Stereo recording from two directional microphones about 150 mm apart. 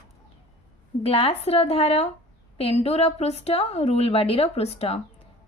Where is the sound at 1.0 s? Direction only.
40° left (ahead or behind).